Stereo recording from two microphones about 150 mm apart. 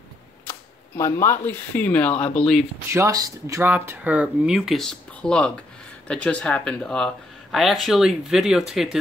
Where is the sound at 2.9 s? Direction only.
20° right (ahead or behind).